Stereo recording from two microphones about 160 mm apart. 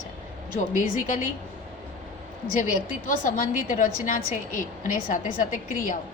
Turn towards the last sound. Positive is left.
turn(degrees=60)  # may be behind; listen again after turning